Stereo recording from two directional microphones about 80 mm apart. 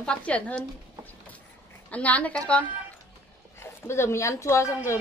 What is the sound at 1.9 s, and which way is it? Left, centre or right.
Speech, centre.